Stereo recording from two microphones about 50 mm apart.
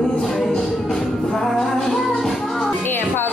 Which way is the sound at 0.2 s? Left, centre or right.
Centre.